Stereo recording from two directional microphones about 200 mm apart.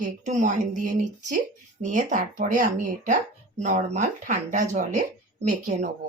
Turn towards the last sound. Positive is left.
turn(degrees=-35)  # may be behind; listen again after turning